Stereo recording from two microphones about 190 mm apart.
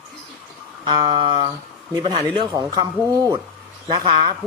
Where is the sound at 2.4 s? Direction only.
25° right (ahead or behind).